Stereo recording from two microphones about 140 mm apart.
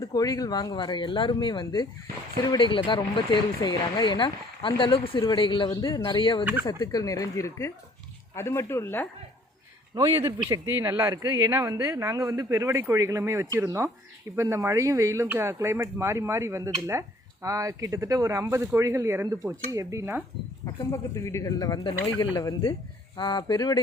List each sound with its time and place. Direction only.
0.0 s speech: 25° left (ahead or behind)
6.4 s speech: 10° right (ahead or behind)
6.7 s speech: 25° left (ahead or behind)
9.9 s speech: 30° right (ahead or behind)
10.7 s speech: 15° right (ahead or behind)
20.9 s speech: 20° left (ahead or behind)